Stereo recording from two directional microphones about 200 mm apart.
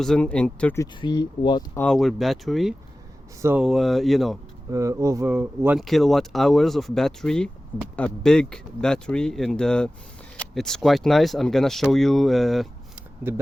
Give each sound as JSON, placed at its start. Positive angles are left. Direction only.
{"t": 0.0, "sound": "speech", "side_deg": 5}
{"t": 1.0, "sound": "speech", "side_deg": 20}
{"t": 1.8, "sound": "speech", "side_deg": 0}
{"t": 4.7, "sound": "speech", "side_deg": -15}
{"t": 13.3, "sound": "speech", "side_deg": -10}